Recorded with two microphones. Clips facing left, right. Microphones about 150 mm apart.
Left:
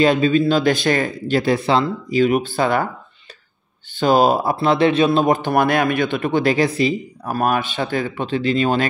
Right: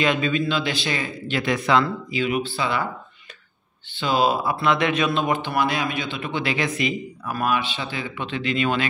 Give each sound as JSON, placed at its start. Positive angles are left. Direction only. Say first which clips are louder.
{"t": 0.0, "sound": "speech", "louder": "left 7 dB", "side_deg": 35}
{"t": 3.9, "sound": "speech", "louder": "left 6 dB", "side_deg": 45}